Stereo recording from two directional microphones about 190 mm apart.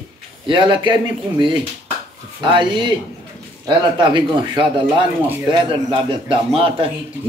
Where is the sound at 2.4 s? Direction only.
25° right (ahead or behind).